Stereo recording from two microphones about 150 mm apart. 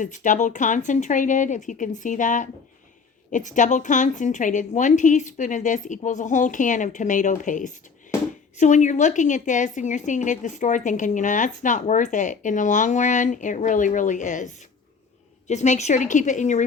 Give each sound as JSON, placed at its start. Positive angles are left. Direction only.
{"t": 0.0, "sound": "a woman's voice", "side_deg": 55}